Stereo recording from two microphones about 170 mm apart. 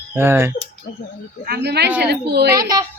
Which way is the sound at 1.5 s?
75° right (ahead or behind).